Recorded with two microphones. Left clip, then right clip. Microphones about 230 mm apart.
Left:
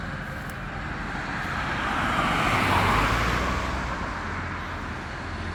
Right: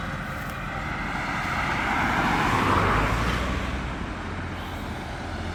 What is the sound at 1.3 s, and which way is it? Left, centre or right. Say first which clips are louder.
Vehicle: right 2 dB; centre.